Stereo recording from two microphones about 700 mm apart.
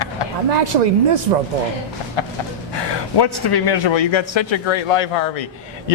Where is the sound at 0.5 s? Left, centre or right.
Right.